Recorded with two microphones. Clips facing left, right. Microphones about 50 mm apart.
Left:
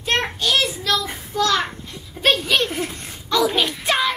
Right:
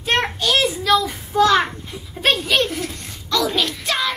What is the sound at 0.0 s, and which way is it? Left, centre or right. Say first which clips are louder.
Child singing: right 2 dB; centre.